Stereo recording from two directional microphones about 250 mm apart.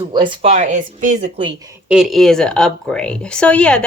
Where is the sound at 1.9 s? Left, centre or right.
Centre.